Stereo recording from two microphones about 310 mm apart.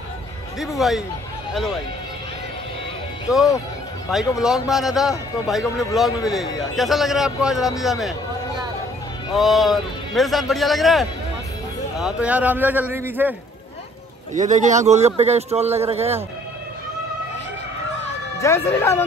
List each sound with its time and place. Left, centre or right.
0.6 s a man's voice: centre
4.1 s a man's voice: centre
9.3 s a man's voice: centre
14.3 s a man's voice: right
18.4 s speech: centre